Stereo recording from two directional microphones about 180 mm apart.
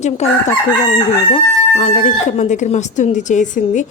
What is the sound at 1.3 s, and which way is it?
Speech, 40° left (ahead or behind).